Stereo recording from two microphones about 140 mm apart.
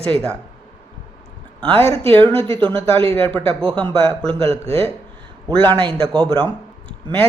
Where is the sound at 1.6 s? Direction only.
40° right (ahead or behind).